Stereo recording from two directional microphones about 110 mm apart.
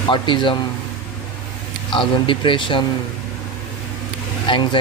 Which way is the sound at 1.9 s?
50° left (ahead or behind).